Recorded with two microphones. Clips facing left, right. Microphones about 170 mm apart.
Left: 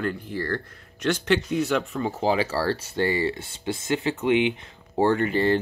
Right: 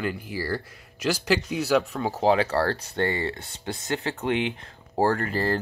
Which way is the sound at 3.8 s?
35° right (ahead or behind).